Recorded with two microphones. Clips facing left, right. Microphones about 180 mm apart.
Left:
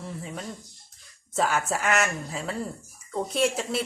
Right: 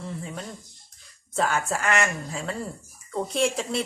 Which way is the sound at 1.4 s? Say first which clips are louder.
Even; 5° left (ahead or behind).